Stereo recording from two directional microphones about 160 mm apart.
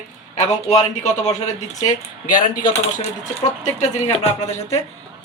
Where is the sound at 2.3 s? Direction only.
55° left (ahead or behind).